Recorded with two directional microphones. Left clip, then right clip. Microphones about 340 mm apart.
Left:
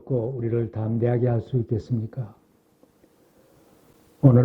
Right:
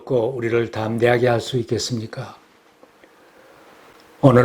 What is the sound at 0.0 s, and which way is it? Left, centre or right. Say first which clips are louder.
Speech: right 7 dB; right.